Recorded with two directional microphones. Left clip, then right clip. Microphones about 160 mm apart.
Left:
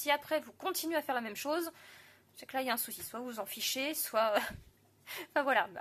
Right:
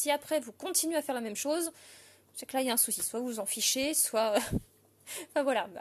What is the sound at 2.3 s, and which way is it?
Speech, 45° right (ahead or behind).